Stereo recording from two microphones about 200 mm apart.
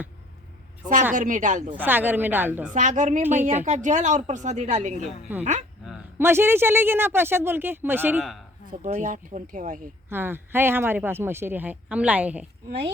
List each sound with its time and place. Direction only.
1.1 s speech: 40° right (ahead or behind)
1.7 s speech: 10° right (ahead or behind)
2.7 s speech: 40° right (ahead or behind)
5.8 s a sound: centre (ahead or behind)
6.2 s speech: 10° right (ahead or behind)
8.7 s speech: 40° right (ahead or behind)
10.1 s speech: 10° right (ahead or behind)